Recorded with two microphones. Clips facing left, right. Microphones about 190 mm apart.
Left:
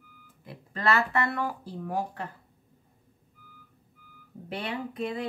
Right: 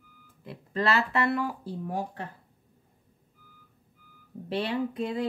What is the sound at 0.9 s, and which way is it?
Speech, 30° right (ahead or behind).